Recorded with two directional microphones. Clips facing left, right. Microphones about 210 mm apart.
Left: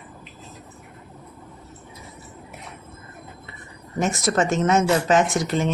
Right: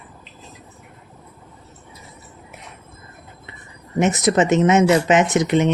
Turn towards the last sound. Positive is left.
turn(degrees=-20)  # may be behind; listen again after turning